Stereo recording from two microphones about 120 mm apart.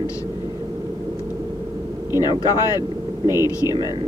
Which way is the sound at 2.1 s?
35° left (ahead or behind).